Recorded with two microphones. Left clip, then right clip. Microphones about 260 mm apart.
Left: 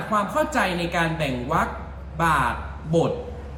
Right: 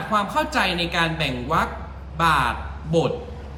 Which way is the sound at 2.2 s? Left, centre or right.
Centre.